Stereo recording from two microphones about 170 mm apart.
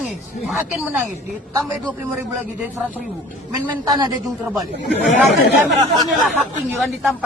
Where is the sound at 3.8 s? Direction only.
25° right (ahead or behind).